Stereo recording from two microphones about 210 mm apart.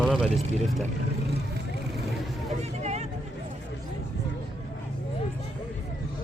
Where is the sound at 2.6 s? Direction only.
30° right (ahead or behind).